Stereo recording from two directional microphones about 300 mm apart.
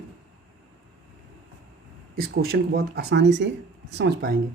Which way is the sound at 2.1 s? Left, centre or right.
Right.